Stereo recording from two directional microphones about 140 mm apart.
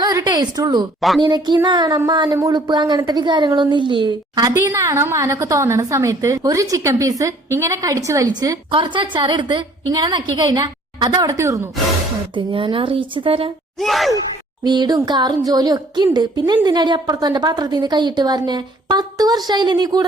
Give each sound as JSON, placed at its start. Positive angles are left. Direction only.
{"t": 0.0, "sound": "a sound", "side_deg": -30}
{"t": 1.2, "sound": "speech", "side_deg": -30}
{"t": 4.6, "sound": "a woman's voice", "side_deg": -20}
{"t": 12.3, "sound": "speech", "side_deg": -35}
{"t": 13.7, "sound": "gasp", "side_deg": 0}
{"t": 14.6, "sound": "a woman's voice", "side_deg": -30}